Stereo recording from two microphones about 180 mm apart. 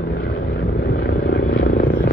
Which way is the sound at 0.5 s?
60° left (ahead or behind).